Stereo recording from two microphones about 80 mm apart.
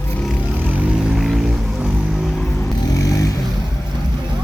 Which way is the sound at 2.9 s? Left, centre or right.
Left.